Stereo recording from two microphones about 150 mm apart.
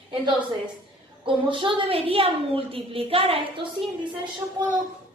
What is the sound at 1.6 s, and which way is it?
A woman's voice, 35° right (ahead or behind).